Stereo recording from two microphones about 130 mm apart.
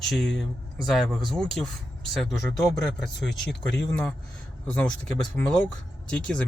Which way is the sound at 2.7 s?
Centre (ahead or behind).